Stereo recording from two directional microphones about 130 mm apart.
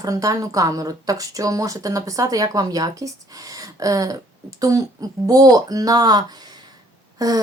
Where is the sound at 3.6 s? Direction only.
25° right (ahead or behind).